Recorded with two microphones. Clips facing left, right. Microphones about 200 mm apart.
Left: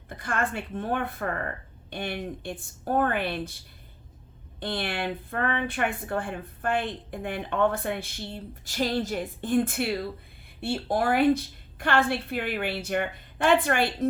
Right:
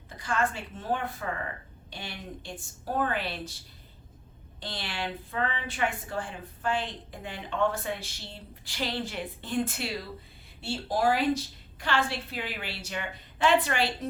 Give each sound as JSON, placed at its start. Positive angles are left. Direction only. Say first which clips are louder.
{"t": 0.1, "sound": "a woman's voice", "louder": "even", "side_deg": 55}
{"t": 4.6, "sound": "a woman's voice", "louder": "left 6 dB", "side_deg": 55}